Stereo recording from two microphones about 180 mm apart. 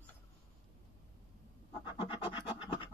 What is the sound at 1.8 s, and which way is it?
Scratch, 30° left (ahead or behind).